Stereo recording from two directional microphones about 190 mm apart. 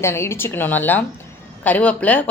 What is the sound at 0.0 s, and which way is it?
A woman's voice, 15° left (ahead or behind).